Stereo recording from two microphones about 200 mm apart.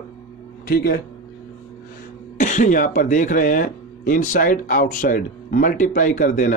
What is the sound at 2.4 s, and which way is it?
A man's voice, 40° left (ahead or behind).